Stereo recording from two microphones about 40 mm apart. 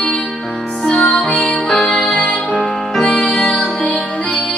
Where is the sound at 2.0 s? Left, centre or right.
Left.